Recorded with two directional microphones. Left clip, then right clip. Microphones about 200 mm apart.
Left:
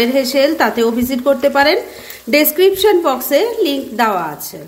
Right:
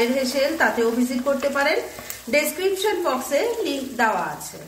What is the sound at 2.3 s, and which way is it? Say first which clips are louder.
A woman's voice: left 9 dB; 50° left (ahead or behind).